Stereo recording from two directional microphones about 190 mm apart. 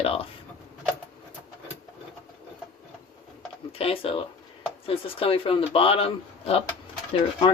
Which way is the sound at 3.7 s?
30° left (ahead or behind).